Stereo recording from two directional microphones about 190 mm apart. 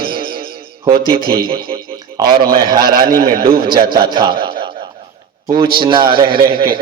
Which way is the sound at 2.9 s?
50° right (ahead or behind).